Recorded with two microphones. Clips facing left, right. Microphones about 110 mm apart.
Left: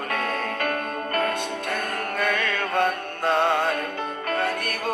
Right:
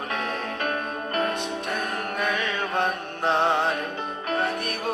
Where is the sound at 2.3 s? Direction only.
50° left (ahead or behind).